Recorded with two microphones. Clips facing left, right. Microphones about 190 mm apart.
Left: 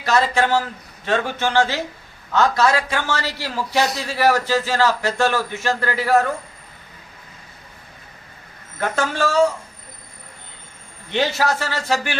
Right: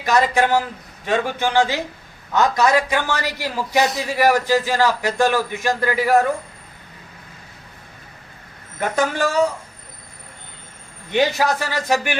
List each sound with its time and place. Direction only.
0.0 s a man's voice: 15° right (ahead or behind)
8.8 s a man's voice: 15° right (ahead or behind)
11.1 s a man's voice: 15° right (ahead or behind)